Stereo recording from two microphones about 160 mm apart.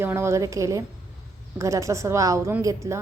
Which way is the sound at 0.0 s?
15° right (ahead or behind).